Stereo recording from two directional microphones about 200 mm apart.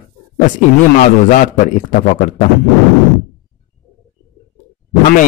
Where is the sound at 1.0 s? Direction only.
40° left (ahead or behind).